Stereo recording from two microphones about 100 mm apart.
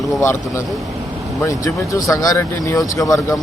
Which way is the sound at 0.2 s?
25° left (ahead or behind).